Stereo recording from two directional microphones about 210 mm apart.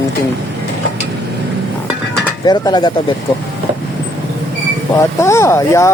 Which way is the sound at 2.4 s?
20° left (ahead or behind).